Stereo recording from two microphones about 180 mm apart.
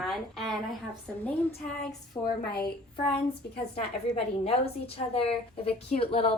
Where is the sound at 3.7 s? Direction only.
35° left (ahead or behind).